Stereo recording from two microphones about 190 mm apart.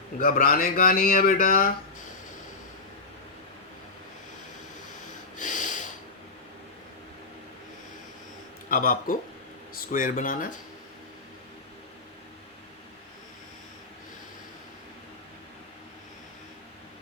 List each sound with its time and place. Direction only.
0.2 s speech: 45° left (ahead or behind)
5.4 s snort: 40° left (ahead or behind)
8.7 s speech: 50° left (ahead or behind)